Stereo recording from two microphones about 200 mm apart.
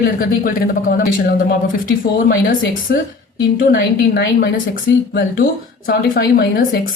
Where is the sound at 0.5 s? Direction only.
45° left (ahead or behind).